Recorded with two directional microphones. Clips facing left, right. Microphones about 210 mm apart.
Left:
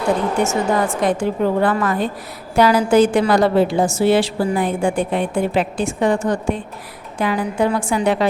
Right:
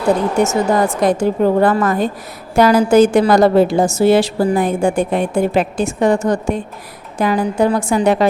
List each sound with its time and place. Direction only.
0.4 s a woman's voice: 40° right (ahead or behind)